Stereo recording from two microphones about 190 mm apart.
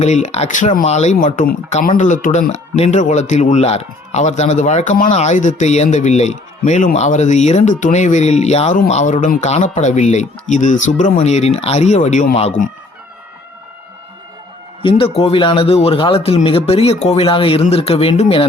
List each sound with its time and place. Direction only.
0.0 s speech: 35° left (ahead or behind)
14.8 s a man's voice: 30° left (ahead or behind)